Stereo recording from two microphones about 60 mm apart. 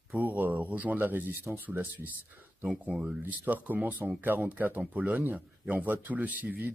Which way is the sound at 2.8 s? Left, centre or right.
Right.